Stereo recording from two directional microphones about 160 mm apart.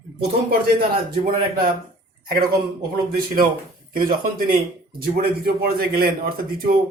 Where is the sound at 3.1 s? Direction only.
60° right (ahead or behind).